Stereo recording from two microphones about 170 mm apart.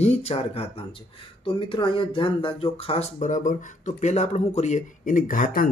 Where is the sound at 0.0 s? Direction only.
40° left (ahead or behind).